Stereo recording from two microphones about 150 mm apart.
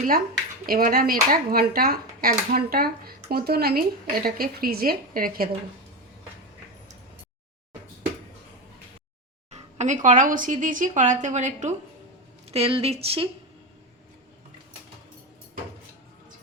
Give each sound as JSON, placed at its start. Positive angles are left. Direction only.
{"t": 0.7, "sound": "speech", "side_deg": -75}
{"t": 9.5, "sound": "speech", "side_deg": -50}
{"t": 12.5, "sound": "speech", "side_deg": -40}